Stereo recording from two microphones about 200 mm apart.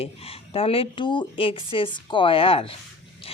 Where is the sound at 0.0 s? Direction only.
30° left (ahead or behind).